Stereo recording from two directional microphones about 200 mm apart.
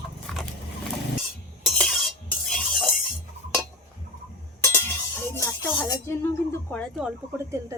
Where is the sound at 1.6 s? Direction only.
Centre (ahead or behind).